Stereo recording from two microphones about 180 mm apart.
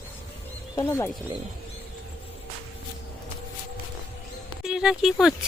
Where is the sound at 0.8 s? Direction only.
15° left (ahead or behind).